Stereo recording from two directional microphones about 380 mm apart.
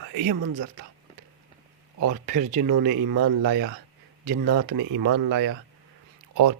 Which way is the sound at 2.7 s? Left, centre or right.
Right.